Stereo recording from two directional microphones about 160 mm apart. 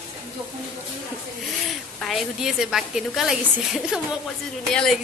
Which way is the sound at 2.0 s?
Centre (ahead or behind).